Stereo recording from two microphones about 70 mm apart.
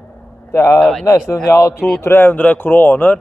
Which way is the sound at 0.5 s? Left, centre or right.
Left.